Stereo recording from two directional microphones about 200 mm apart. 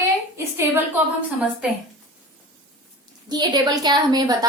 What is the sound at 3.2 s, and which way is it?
A woman's voice, 20° right (ahead or behind).